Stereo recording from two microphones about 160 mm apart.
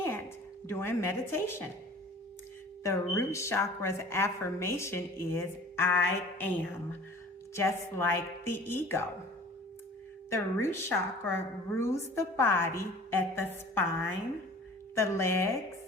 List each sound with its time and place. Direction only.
0.7 s speech: 15° left (ahead or behind)
2.8 s speech: 20° left (ahead or behind)
10.2 s speech: 15° left (ahead or behind)